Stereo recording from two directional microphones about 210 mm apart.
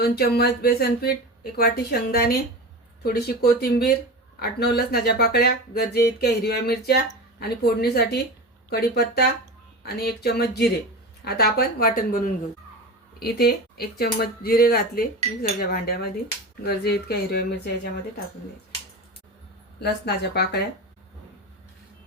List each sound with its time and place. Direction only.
0.0 s speech: 50° left (ahead or behind)
19.8 s speech: 50° left (ahead or behind)